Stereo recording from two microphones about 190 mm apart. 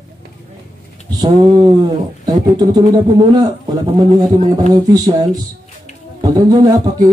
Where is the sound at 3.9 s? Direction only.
20° right (ahead or behind).